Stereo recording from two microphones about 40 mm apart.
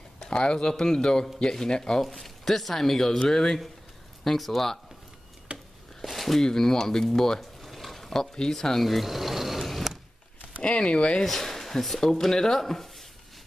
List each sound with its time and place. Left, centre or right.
0.3 s speech: left
2.0 s speech: centre
5.5 s a sound: right
5.9 s a sound: centre
6.4 s speech: centre
7.3 s a sound: centre
8.4 s speech: centre
8.8 s mechanisms: centre
10.6 s speech: left
11.2 s speech: centre